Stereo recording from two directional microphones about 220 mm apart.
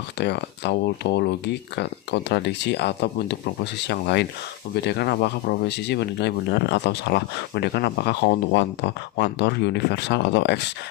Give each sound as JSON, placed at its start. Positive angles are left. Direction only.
{"t": 0.2, "sound": "speech", "side_deg": 50}